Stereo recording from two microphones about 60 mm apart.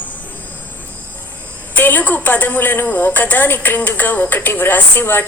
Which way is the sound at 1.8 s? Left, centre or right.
Left.